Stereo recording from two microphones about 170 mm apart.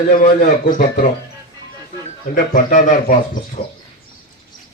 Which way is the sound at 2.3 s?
50° left (ahead or behind).